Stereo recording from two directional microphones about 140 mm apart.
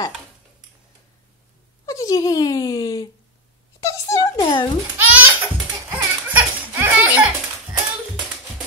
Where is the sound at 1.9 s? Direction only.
25° left (ahead or behind).